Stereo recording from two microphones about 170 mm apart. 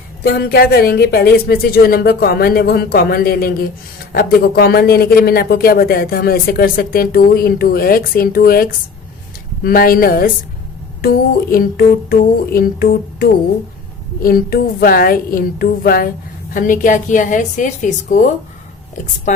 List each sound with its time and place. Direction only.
0.3 s speech: 70° left (ahead or behind)
11.5 s a woman's voice: 60° left (ahead or behind)